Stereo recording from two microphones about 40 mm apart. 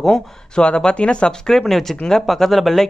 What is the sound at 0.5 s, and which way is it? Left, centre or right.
Speech, left.